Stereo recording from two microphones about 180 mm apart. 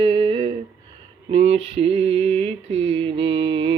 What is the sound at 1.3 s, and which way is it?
Mantra, 35° right (ahead or behind).